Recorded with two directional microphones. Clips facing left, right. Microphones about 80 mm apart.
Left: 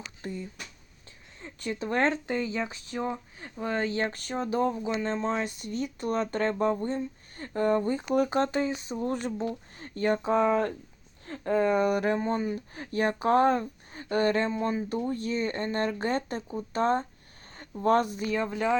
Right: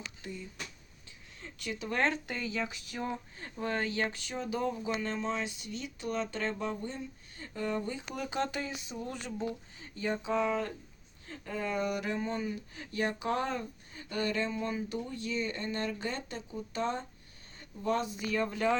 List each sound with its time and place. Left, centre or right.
0.2 s speech: left
3.3 s speech: centre
3.8 s speech: left
4.1 s speech: left
4.9 s speech: left
9.5 s speech: left
18.3 s speech: left